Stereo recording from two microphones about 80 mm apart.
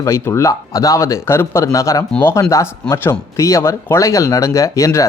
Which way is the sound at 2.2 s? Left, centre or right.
Left.